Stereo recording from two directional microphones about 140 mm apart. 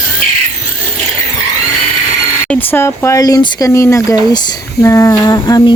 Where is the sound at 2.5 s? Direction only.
15° left (ahead or behind).